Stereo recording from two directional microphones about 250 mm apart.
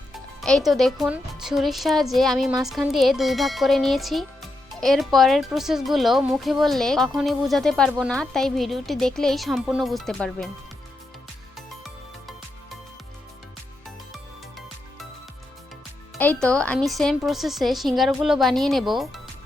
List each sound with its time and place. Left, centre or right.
0.4 s speech: centre
16.1 s speech: centre